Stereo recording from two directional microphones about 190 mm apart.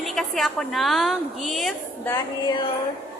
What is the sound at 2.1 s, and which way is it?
Speech, 25° left (ahead or behind).